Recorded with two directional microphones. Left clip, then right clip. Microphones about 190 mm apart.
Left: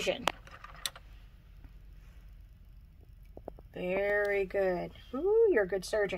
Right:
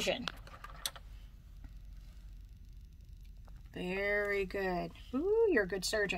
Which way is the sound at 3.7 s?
15° left (ahead or behind).